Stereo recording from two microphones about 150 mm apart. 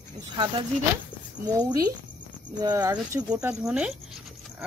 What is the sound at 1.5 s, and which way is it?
Speech, 25° right (ahead or behind).